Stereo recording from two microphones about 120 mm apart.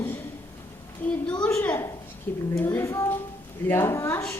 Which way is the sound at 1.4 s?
20° left (ahead or behind).